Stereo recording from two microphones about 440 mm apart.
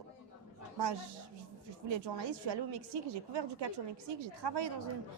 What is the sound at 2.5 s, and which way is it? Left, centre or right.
A woman's voice, right.